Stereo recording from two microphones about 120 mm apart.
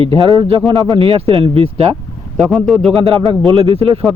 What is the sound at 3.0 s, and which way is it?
Speech, 50° right (ahead or behind).